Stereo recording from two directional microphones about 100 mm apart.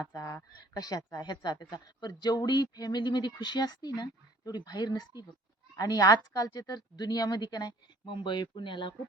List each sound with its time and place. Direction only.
0.0 s a woman's voice: 35° left (ahead or behind)
8.0 s speech: 55° left (ahead or behind)